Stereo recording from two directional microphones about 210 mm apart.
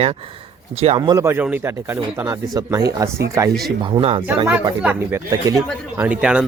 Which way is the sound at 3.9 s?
25° right (ahead or behind).